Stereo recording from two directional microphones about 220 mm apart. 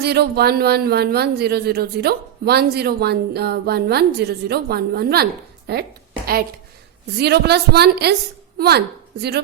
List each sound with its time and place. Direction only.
0.0 s speech: 45° right (ahead or behind)
7.2 s speech: 50° right (ahead or behind)